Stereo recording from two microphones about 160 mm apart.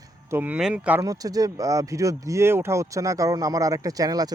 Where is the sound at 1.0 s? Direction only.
20° right (ahead or behind).